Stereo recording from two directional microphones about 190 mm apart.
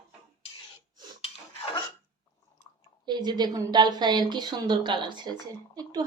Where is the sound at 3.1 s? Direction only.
20° right (ahead or behind).